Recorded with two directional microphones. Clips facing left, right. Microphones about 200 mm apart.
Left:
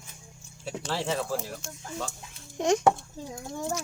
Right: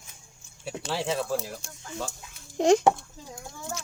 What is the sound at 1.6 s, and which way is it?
A child's voice, 35° right (ahead or behind).